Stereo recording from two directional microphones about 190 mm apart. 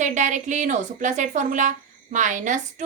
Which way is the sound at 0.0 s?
40° right (ahead or behind).